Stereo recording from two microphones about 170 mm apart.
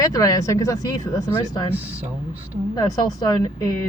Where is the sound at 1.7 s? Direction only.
10° right (ahead or behind).